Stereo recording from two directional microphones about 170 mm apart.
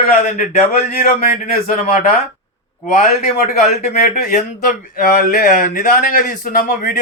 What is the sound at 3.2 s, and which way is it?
Speech, 45° left (ahead or behind).